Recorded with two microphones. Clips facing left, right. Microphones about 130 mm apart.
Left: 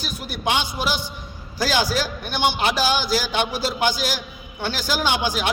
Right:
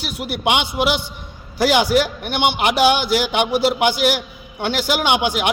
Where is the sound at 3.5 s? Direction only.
65° right (ahead or behind).